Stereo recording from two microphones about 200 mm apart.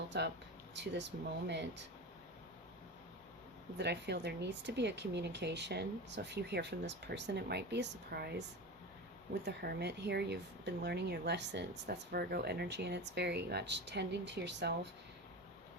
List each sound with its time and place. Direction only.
0.1 s speech: 55° right (ahead or behind)
3.8 s speech: 60° right (ahead or behind)